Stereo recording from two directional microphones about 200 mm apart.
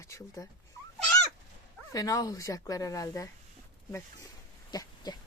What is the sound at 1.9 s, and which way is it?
Speech, 15° left (ahead or behind).